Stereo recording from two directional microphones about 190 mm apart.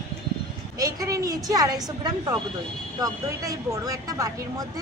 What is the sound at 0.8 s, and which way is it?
A woman's voice, 15° right (ahead or behind).